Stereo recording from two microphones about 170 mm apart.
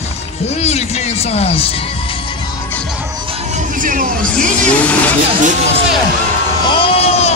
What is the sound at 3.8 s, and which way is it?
Vehicle, 50° right (ahead or behind).